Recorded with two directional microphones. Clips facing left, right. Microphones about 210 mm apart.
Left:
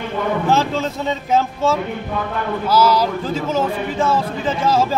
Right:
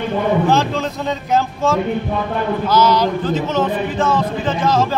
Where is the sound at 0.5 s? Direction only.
5° left (ahead or behind).